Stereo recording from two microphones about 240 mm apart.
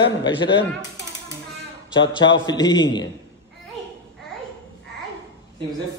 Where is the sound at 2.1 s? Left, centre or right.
Centre.